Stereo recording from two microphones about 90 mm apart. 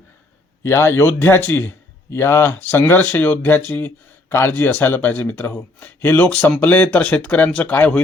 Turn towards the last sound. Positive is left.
turn(degrees=15)  # may be behind; listen again after turning